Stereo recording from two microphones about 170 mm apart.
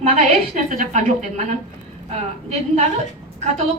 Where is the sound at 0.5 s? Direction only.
50° right (ahead or behind).